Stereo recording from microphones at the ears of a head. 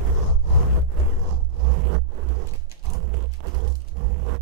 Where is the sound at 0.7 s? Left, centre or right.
Right.